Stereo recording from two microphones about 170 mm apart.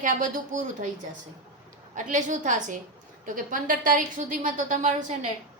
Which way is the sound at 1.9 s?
45° right (ahead or behind).